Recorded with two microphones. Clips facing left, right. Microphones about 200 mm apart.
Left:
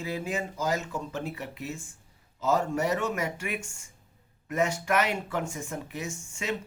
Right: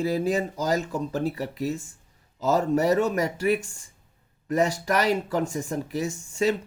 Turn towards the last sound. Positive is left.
turn(degrees=-35)  # may be behind; listen again after turning